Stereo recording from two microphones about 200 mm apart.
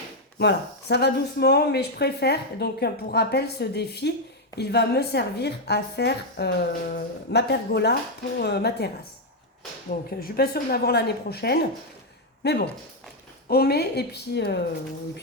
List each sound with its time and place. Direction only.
0.3 s speech: 55° left (ahead or behind)
9.9 s a woman's voice: 50° left (ahead or behind)